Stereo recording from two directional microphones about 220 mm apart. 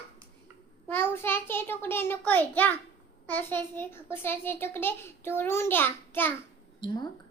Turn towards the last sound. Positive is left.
turn(degrees=20)  # may be behind; listen again after turning